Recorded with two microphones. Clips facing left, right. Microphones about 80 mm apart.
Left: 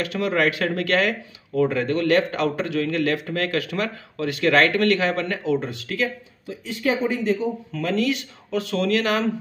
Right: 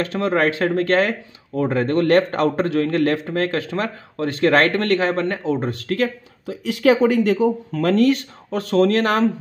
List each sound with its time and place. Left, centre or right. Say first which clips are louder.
0.0 s speech: right 3 dB; right
3.3 s speech: right 3 dB; right
6.4 s speech: right 8 dB; right
7.7 s speech: right 5 dB; right